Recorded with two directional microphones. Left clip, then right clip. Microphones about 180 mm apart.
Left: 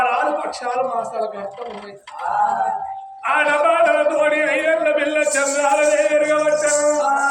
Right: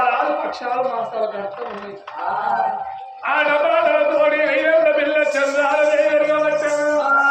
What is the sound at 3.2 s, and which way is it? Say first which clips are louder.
A man's voice: left 1 dB; centre (ahead or behind).